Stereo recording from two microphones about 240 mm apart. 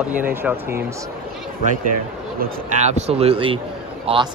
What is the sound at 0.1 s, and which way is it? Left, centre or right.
Speech, centre.